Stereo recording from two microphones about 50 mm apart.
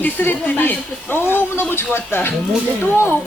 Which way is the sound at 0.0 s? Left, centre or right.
Left.